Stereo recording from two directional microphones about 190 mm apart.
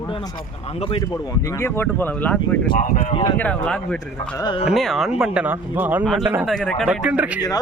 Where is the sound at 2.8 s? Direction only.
45° left (ahead or behind).